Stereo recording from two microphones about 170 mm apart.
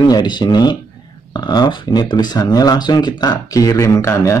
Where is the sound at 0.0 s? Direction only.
25° left (ahead or behind).